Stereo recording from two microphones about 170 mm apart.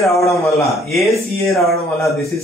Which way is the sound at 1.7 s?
15° left (ahead or behind).